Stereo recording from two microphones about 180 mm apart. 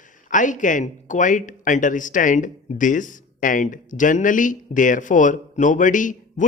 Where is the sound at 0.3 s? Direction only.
45° left (ahead or behind).